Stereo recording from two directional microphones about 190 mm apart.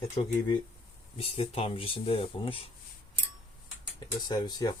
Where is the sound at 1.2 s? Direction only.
30° left (ahead or behind).